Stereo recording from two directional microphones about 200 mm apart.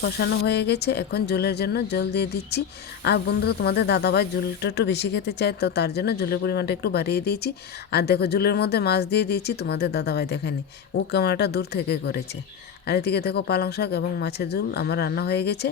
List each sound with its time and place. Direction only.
0.0 s speech: 55° left (ahead or behind)